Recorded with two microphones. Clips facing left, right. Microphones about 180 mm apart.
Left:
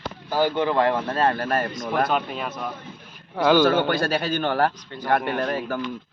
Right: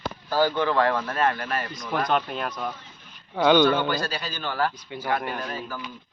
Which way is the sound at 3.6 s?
55° left (ahead or behind).